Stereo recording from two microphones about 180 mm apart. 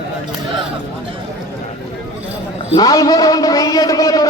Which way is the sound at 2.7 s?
20° left (ahead or behind).